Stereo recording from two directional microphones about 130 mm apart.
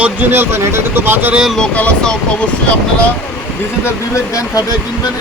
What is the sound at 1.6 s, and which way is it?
Speech, 10° left (ahead or behind).